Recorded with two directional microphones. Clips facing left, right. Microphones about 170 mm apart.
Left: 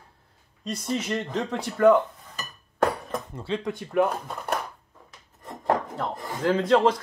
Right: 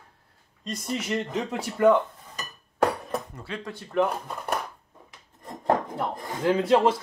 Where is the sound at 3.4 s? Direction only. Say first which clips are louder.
Left 7 dB; 25° left (ahead or behind).